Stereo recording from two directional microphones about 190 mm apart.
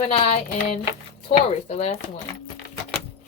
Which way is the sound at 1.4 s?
35° left (ahead or behind).